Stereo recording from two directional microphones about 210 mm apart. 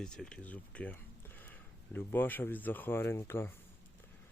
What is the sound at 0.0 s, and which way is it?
Speech, 5° left (ahead or behind).